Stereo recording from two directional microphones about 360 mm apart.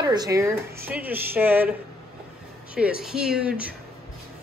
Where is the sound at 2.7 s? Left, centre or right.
Centre.